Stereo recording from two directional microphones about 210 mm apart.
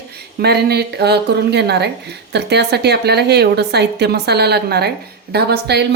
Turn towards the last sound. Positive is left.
turn(degrees=-50)  # may be behind; listen again after turning